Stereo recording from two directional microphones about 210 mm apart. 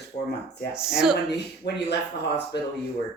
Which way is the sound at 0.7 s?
5° right (ahead or behind).